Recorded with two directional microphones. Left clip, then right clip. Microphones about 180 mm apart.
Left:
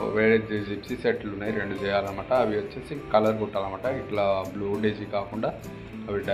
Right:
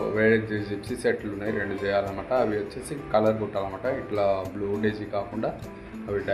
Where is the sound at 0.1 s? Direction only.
15° right (ahead or behind).